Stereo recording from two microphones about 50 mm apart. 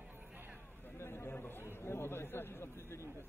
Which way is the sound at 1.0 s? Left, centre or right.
Left.